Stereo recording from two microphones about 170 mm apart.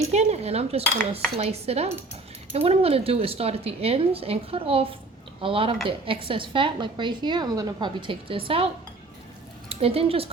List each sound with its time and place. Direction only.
0.1 s a woman's voice: 40° right (ahead or behind)
9.6 s speech: 35° right (ahead or behind)